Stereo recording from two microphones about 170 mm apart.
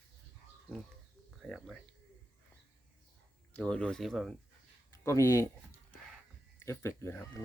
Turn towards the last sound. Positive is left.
turn(degrees=15)  # may be behind; listen again after turning